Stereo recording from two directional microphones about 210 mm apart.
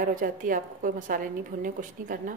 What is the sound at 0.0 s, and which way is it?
A woman's voice, 40° right (ahead or behind).